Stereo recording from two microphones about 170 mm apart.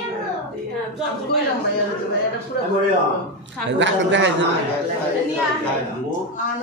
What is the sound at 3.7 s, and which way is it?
Speech, 90° right.